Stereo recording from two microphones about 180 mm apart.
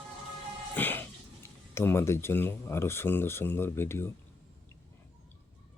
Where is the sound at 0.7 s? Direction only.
10° left (ahead or behind).